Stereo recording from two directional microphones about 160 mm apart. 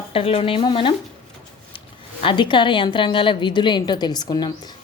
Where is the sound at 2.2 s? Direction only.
30° left (ahead or behind).